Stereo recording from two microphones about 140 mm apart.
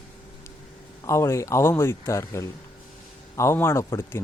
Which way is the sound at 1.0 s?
20° left (ahead or behind).